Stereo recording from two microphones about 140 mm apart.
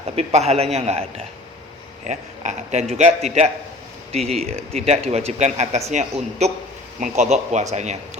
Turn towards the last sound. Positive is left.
turn(degrees=-55)  # may be behind; listen again after turning